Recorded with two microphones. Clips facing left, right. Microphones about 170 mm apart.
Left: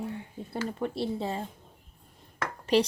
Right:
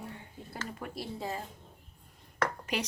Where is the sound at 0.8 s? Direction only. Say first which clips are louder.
Left 7 dB; 30° left (ahead or behind).